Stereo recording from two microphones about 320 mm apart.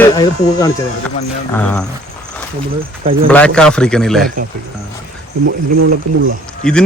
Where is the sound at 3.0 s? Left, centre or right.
Right.